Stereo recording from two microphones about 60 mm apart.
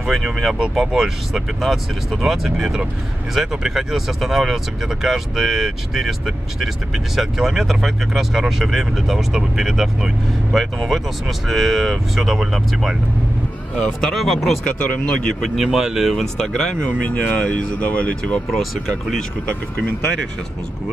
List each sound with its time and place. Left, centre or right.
0.0 s speech: centre
13.7 s speech: centre
14.1 s speech: centre
14.6 s speech: centre
15.5 s speech: centre
16.3 s speech: centre
17.1 s speech: left
18.5 s speech: centre